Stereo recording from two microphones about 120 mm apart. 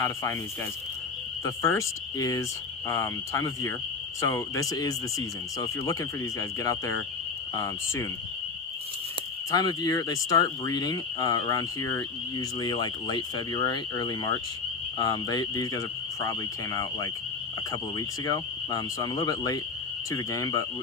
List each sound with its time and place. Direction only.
0.0 s speech: 25° left (ahead or behind)
1.5 s speech: 25° left (ahead or behind)
9.5 s speech: 35° left (ahead or behind)
17.7 s speech: 30° left (ahead or behind)